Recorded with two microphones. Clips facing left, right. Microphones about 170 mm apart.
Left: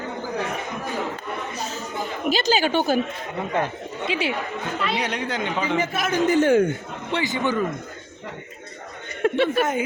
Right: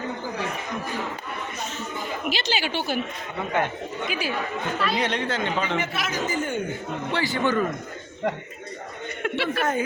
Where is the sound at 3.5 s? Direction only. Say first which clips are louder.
Right 1 dB; 30° left (ahead or behind).